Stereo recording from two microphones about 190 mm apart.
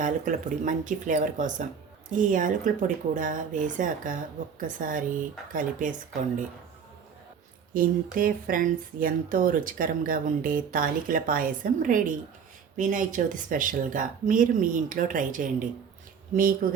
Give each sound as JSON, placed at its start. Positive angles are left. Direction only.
{"t": 0.0, "sound": "speech", "side_deg": -45}
{"t": 7.7, "sound": "speech", "side_deg": -45}